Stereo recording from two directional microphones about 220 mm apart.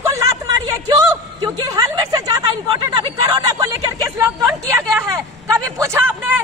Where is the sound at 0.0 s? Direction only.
15° right (ahead or behind).